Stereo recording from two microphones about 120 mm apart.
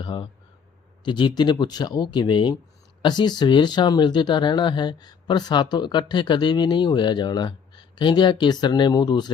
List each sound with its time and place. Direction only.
0.0 s speech: 40° left (ahead or behind)